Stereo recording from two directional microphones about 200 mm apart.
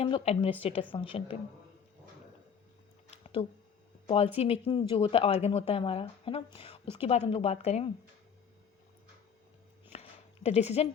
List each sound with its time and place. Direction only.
0.0 s a woman's voice: 30° left (ahead or behind)
4.0 s a woman's voice: 30° left (ahead or behind)
9.9 s a sound: 30° left (ahead or behind)